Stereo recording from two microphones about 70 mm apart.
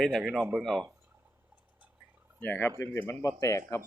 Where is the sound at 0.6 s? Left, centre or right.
Centre.